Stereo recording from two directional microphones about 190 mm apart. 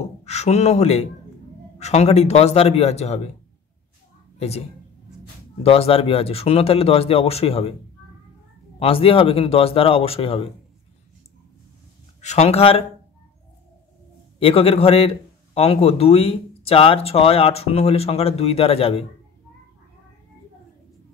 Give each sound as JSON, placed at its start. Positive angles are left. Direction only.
{"t": 0.0, "sound": "a sound", "side_deg": 35}
{"t": 1.8, "sound": "a man's voice", "side_deg": 35}
{"t": 4.4, "sound": "a woman's voice", "side_deg": 35}
{"t": 8.7, "sound": "speech", "side_deg": 30}
{"t": 12.2, "sound": "a man's voice", "side_deg": 35}
{"t": 14.4, "sound": "a man's voice", "side_deg": 30}